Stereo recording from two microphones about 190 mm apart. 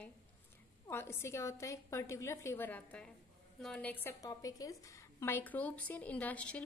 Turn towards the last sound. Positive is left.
turn(degrees=5)  # may be behind; listen again after turning